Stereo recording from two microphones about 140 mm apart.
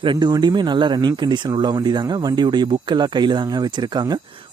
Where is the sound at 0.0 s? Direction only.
35° right (ahead or behind).